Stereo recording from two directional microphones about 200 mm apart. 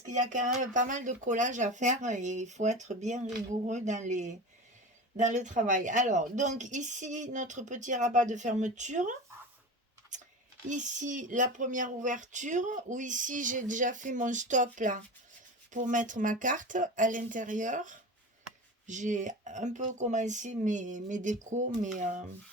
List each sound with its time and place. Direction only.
0.1 s speech: 35° right (ahead or behind)
10.1 s a sound: 40° right (ahead or behind)
10.7 s speech: 40° right (ahead or behind)